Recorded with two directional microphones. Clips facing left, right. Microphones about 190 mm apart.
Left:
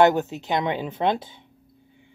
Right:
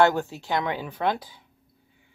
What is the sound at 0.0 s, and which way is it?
Speech, 20° left (ahead or behind).